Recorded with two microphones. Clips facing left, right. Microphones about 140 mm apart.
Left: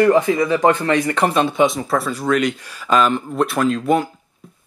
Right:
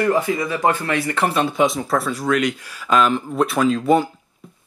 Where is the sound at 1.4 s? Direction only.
Centre (ahead or behind).